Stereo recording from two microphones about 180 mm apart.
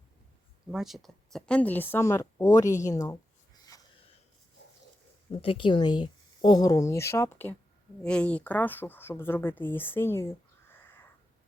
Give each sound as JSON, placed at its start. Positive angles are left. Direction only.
{"t": 0.7, "sound": "speech", "side_deg": 0}
{"t": 5.3, "sound": "speech", "side_deg": 30}